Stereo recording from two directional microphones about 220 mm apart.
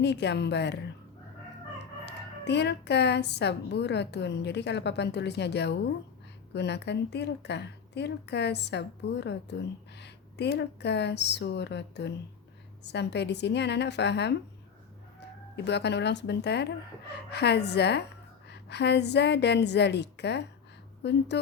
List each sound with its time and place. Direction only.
0.0 s speech: 50° left (ahead or behind)
2.0 s speech: 50° left (ahead or behind)
15.5 s speech: 50° left (ahead or behind)